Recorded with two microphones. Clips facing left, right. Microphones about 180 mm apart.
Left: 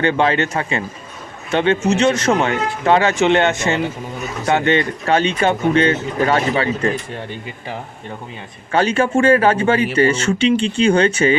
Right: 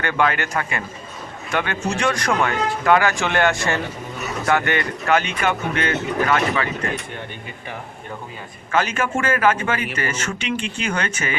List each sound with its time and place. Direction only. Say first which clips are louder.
0.0 s speech: left 5 dB; 25° left (ahead or behind)
8.7 s speech: left 6 dB; 30° left (ahead or behind)